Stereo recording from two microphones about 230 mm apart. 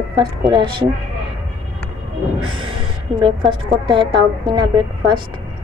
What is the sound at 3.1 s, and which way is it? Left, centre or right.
Speech, right.